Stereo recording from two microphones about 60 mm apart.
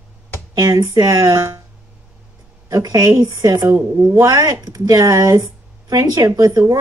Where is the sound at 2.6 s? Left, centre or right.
Right.